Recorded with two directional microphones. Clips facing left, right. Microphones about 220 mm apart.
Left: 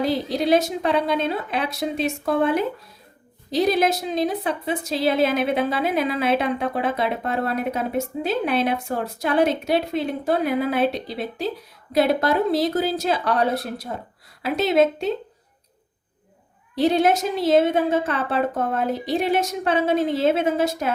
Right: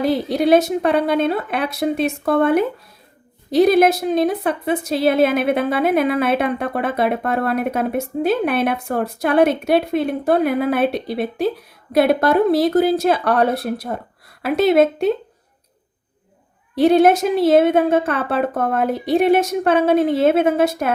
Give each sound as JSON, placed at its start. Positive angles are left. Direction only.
{"t": 0.0, "sound": "a woman's voice", "side_deg": -60}
{"t": 16.7, "sound": "a woman's voice", "side_deg": -55}